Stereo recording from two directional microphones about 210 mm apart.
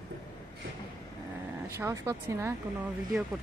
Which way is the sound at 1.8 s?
15° right (ahead or behind).